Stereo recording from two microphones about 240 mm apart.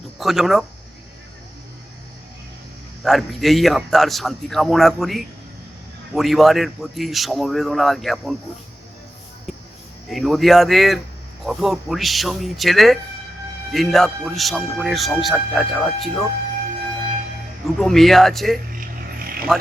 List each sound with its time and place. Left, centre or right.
0.2 s speech: centre
3.0 s speech: centre
10.1 s speech: centre
17.7 s speech: centre
18.7 s a sound: right